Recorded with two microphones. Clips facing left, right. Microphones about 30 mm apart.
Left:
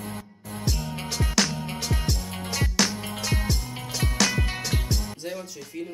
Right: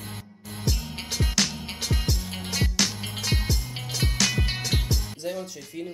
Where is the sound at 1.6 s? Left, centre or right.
Right.